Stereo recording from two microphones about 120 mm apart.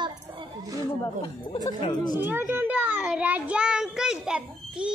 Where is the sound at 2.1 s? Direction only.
15° right (ahead or behind).